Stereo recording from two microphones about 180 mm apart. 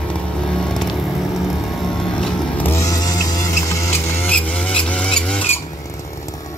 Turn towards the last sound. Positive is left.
turn(degrees=5)  # may be behind; listen again after turning